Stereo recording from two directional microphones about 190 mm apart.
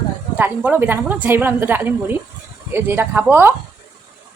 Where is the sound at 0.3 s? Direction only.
10° right (ahead or behind).